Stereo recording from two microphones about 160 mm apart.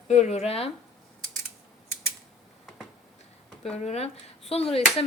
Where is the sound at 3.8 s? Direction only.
40° left (ahead or behind).